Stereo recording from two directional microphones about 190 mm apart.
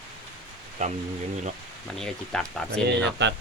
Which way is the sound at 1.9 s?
Centre (ahead or behind).